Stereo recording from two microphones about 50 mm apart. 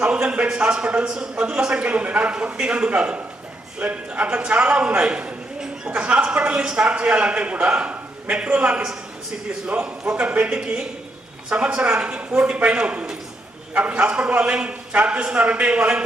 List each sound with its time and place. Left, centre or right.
0.0 s a man's voice: centre